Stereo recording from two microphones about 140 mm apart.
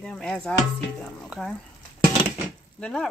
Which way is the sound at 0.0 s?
5° left (ahead or behind).